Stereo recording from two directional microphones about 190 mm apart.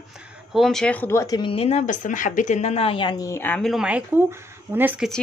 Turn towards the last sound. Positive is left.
turn(degrees=-10)  # may be behind; listen again after turning